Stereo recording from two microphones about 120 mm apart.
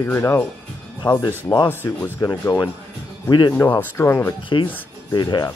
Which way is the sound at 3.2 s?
40° left (ahead or behind).